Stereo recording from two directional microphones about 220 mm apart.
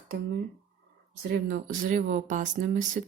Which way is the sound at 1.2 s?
40° right (ahead or behind).